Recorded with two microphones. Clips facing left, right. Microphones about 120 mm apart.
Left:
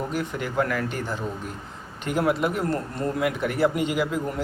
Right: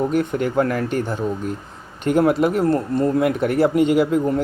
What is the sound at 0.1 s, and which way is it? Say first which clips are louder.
Speech: right 8 dB; 55° right (ahead or behind).